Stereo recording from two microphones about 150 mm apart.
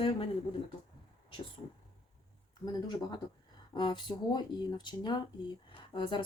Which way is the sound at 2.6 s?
30° left (ahead or behind).